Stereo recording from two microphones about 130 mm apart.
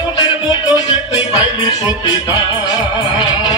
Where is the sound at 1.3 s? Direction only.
30° left (ahead or behind).